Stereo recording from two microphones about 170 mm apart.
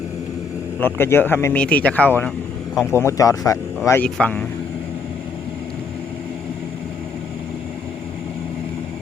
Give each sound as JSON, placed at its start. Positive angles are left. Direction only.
{"t": 0.8, "sound": "speech", "side_deg": 15}